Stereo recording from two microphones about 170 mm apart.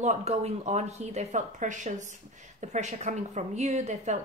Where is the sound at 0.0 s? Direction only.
40° right (ahead or behind).